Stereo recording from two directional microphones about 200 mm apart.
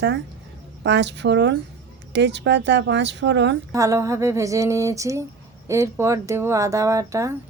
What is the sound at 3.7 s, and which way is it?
Speech, 15° right (ahead or behind).